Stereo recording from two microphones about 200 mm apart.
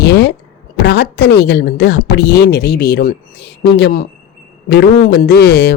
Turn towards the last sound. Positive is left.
turn(degrees=55)  # may be behind; listen again after turning